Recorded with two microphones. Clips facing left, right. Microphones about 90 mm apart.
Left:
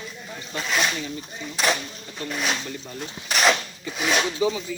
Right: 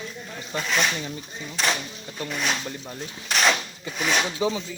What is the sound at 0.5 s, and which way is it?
Snake, centre (ahead or behind).